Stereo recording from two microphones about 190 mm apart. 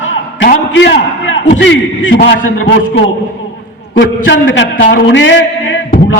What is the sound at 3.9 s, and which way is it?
A man's voice, 75° left (ahead or behind).